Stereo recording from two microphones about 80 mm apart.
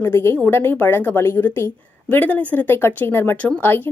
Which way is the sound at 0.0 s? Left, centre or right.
Left.